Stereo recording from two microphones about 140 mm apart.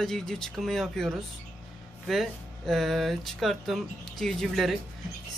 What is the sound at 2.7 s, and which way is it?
Speech, centre (ahead or behind).